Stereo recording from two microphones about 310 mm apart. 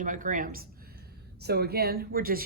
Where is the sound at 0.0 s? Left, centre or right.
Right.